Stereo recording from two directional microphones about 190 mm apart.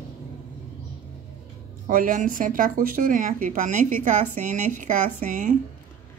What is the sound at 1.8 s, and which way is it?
Speech, 45° right (ahead or behind).